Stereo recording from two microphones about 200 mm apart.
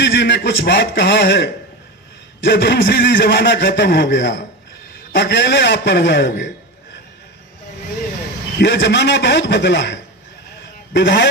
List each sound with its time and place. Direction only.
0.0 s a man's voice: 60° left (ahead or behind)
8.5 s a man's voice: 60° left (ahead or behind)